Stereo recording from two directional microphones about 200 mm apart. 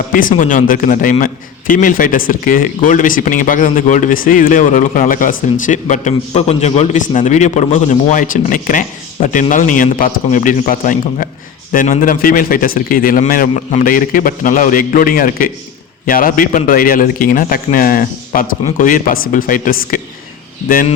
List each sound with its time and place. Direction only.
0.1 s a man's voice: 40° left (ahead or behind)